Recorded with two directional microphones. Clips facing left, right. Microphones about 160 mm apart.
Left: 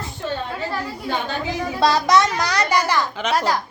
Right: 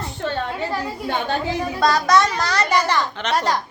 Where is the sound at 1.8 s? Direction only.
20° left (ahead or behind); by 3.6 s 5° left (ahead or behind).